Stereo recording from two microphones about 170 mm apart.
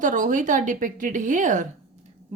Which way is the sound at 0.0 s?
50° right (ahead or behind).